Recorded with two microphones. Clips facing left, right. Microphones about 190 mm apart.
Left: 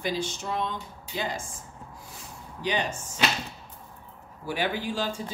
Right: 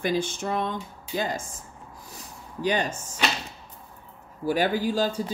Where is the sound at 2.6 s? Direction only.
45° right (ahead or behind).